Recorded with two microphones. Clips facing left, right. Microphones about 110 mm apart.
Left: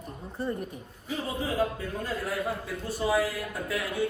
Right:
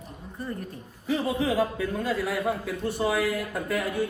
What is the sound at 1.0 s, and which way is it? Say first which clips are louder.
A man's voice: right 6 dB; 80° right.